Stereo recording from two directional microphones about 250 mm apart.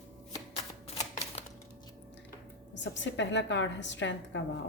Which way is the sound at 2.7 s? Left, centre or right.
Left.